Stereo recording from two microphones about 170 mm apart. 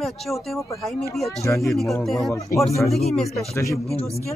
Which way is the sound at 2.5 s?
55° left (ahead or behind).